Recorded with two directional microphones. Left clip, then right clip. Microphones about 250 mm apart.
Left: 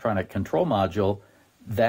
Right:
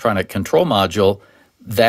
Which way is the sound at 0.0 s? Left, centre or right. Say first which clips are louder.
Right 8 dB; right.